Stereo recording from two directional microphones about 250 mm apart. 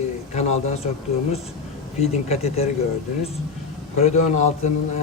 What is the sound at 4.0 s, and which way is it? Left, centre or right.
Speech, left.